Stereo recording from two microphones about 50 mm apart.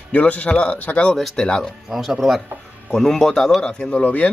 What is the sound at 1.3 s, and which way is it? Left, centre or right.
Speech, centre.